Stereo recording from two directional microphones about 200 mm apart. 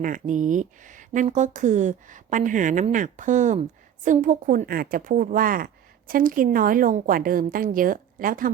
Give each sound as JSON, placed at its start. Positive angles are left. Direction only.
{"t": 0.0, "sound": "speech", "side_deg": -40}